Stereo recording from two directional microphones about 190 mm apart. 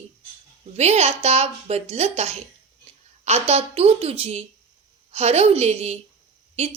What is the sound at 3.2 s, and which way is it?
Speech, 35° right (ahead or behind).